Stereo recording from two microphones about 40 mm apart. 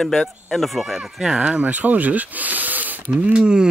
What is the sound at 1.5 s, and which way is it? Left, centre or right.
Speech, right.